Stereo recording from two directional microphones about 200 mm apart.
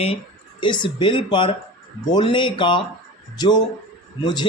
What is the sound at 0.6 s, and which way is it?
Speech, 25° left (ahead or behind).